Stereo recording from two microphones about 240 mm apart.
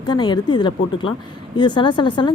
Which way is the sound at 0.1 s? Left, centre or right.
Centre.